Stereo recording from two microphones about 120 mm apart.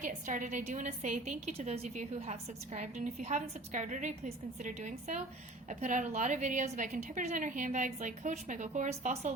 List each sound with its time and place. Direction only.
0.0 s a woman's voice: 90° right